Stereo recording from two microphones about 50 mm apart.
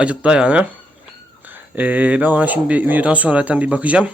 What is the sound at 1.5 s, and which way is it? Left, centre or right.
Speech, right.